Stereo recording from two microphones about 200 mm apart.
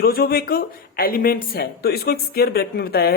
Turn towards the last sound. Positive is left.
turn(degrees=50)  # may be behind; listen again after turning